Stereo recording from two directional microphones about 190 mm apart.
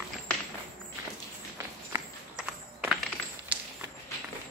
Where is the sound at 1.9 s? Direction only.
5° right (ahead or behind).